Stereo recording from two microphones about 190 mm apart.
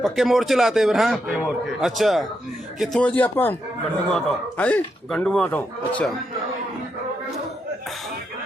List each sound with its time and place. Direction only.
0.0 s a man's voice: centre (ahead or behind)